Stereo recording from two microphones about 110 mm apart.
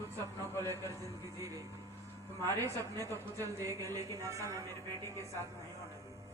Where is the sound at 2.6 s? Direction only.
30° right (ahead or behind).